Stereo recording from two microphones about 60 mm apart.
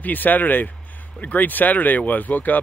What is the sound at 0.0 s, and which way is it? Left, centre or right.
Speech, left.